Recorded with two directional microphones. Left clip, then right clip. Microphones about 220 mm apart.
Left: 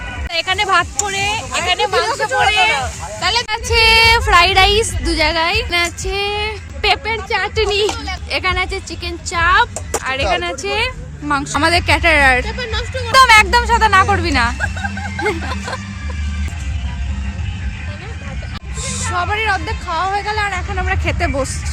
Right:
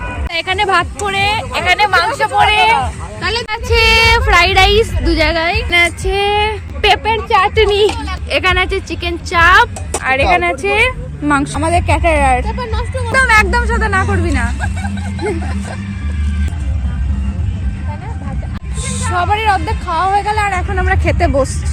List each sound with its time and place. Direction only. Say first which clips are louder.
0.3 s speech: right 1 dB; 10° left (ahead or behind)
1.0 s speech: right 4 dB; 5° right (ahead or behind)
3.2 s speech: left 1 dB; 40° left (ahead or behind)
3.5 s speech: right 1 dB; 10° left (ahead or behind)
5.7 s a woman's voice: right 5 dB; centre (ahead or behind)
10.0 s a woman's voice: right 6 dB; centre (ahead or behind)
11.6 s speech: even; 25° left (ahead or behind)
12.5 s a woman's voice: right 1 dB; 5° left (ahead or behind)
13.1 s speech: left 2 dB; 25° left (ahead or behind)
18.9 s a woman's voice: right 4 dB; centre (ahead or behind)